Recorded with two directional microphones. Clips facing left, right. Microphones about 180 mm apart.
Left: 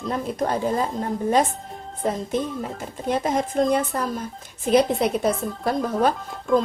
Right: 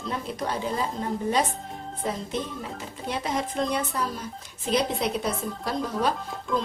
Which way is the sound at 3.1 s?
50° left (ahead or behind).